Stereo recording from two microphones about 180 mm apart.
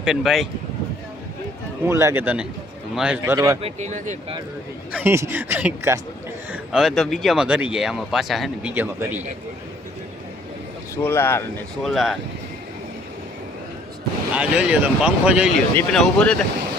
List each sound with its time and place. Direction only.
0.0 s speech: centre (ahead or behind)
1.8 s speech: 15° right (ahead or behind)
3.6 s speech: 40° right (ahead or behind)
4.9 s speech: 10° right (ahead or behind)
10.9 s speech: 15° left (ahead or behind)
11.8 s speech: centre (ahead or behind)
14.3 s speech: 5° right (ahead or behind)
15.7 s speech: 10° left (ahead or behind)